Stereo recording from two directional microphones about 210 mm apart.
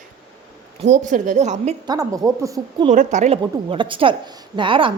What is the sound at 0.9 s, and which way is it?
Speech, 40° right (ahead or behind).